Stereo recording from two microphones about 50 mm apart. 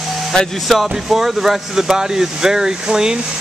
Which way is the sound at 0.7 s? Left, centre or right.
Centre.